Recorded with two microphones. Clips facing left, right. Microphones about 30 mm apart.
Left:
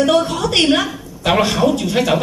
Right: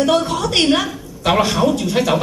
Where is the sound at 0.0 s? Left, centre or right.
Centre.